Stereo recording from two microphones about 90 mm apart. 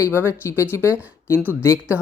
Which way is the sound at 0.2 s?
30° left (ahead or behind).